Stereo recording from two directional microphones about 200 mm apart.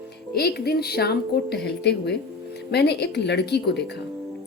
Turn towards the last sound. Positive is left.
turn(degrees=55)  # may be behind; listen again after turning